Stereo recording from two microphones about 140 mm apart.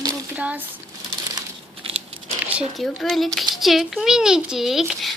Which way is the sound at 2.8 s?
Centre (ahead or behind).